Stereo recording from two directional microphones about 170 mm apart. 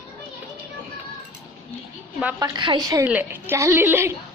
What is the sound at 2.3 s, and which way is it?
Speech, 25° right (ahead or behind).